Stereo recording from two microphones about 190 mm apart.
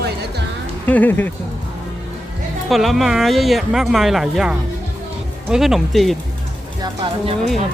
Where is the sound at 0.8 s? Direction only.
10° left (ahead or behind).